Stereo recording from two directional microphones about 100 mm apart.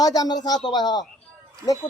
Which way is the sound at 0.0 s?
40° left (ahead or behind).